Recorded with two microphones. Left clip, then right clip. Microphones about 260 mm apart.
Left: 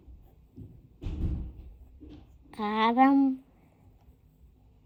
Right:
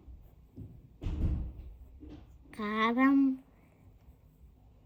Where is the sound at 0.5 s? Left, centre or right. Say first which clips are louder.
Left 1 dB; centre.